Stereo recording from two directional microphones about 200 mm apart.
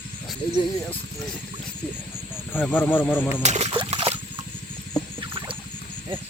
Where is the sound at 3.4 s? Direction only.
30° right (ahead or behind).